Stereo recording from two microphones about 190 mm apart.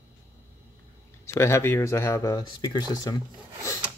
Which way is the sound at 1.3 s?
15° left (ahead or behind).